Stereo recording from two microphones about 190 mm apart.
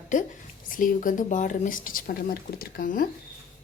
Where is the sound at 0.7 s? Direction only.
45° left (ahead or behind).